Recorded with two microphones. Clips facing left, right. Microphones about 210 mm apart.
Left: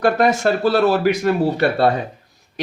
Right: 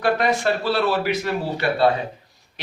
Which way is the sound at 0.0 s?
45° left (ahead or behind).